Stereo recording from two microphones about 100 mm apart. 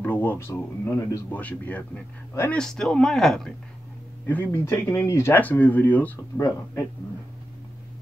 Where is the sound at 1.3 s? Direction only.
15° left (ahead or behind).